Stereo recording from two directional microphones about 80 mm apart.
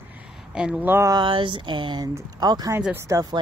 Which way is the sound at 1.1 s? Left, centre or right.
Right.